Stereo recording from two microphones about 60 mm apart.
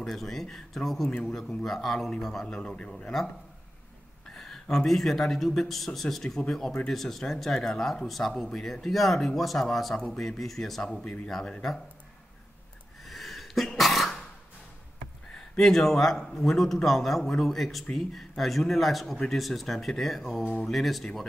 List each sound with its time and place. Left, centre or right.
0.0 s speech: centre
2.9 s speech: centre
4.3 s speech: centre
13.0 s sneeze: centre
15.3 s speech: centre